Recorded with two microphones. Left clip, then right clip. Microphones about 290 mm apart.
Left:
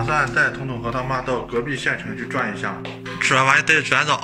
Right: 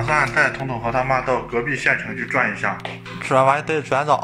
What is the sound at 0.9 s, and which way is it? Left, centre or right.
A man's voice, centre.